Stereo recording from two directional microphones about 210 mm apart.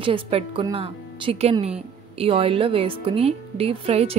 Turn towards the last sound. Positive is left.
turn(degrees=-30)  # may be behind; listen again after turning